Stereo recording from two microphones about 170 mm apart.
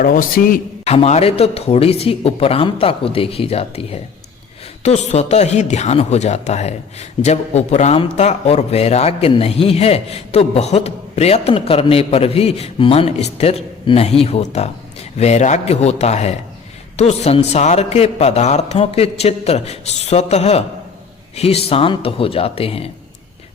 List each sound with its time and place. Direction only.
0.0 s a man's voice: 55° left (ahead or behind)
0.9 s speech: 40° left (ahead or behind)